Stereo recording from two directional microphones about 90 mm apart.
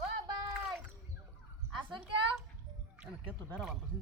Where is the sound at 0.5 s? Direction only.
5° right (ahead or behind).